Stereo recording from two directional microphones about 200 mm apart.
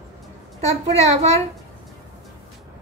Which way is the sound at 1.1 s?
35° right (ahead or behind).